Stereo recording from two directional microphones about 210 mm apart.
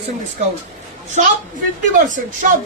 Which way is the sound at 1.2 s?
35° right (ahead or behind).